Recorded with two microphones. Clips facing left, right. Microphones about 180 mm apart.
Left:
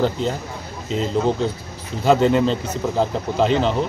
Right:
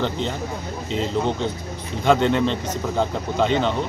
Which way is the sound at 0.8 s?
5° left (ahead or behind).